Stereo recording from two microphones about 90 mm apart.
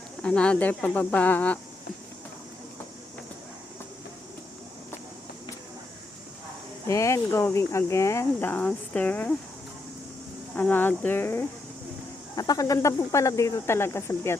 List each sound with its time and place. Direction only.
0.2 s speech: 10° left (ahead or behind)
6.8 s speech: 35° left (ahead or behind)
10.5 s speech: 20° left (ahead or behind)
12.4 s speech: 40° left (ahead or behind)